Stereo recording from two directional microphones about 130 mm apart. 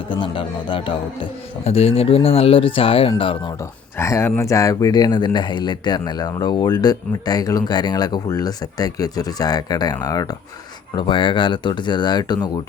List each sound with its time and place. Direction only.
0.1 s a man's voice: 40° left (ahead or behind)
3.9 s speech: 20° left (ahead or behind)
10.9 s speech: 40° left (ahead or behind)